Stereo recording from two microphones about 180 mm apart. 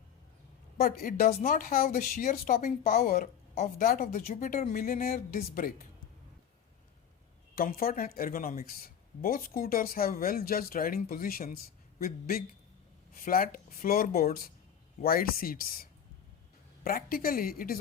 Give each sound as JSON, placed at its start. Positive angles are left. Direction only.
{"t": 0.8, "sound": "speech", "side_deg": 55}
{"t": 7.5, "sound": "a woman's voice", "side_deg": 55}